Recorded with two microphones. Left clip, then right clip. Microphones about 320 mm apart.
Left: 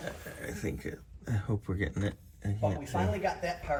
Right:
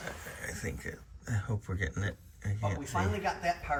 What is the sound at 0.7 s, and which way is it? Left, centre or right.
Speech, centre.